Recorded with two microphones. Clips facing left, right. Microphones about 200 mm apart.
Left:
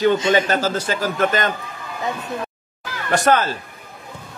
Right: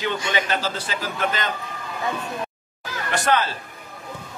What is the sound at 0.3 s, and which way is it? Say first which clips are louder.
A man's voice: left 7 dB; 45° left (ahead or behind).